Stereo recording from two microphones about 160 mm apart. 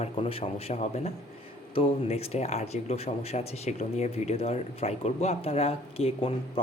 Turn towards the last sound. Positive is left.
turn(degrees=40)  # may be behind; listen again after turning